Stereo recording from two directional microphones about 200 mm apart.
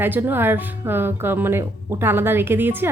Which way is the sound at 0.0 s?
10° right (ahead or behind).